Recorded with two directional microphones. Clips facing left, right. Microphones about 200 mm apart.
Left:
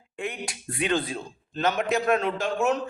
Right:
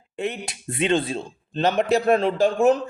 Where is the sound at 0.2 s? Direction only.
25° right (ahead or behind).